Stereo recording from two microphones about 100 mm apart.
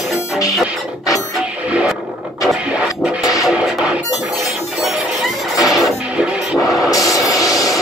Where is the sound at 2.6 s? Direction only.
10° right (ahead or behind).